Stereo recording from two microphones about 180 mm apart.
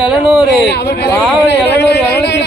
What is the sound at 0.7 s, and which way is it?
Speech, 60° left (ahead or behind).